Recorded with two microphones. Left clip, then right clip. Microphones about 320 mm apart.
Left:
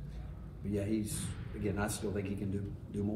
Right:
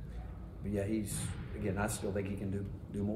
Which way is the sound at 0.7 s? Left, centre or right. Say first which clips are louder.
Even; centre.